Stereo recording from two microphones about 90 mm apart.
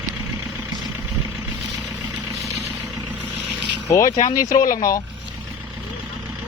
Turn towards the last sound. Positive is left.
turn(degrees=40)  # may be behind; listen again after turning